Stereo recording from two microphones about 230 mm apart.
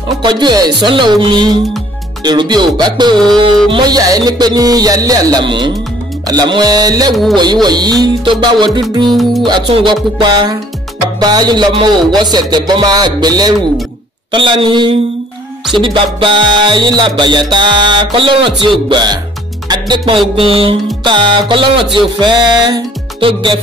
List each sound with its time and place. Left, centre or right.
0.2 s music: centre
9.1 s music: centre
9.5 s music: right